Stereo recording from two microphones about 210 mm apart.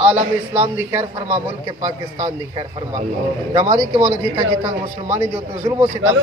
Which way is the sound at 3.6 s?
15° right (ahead or behind).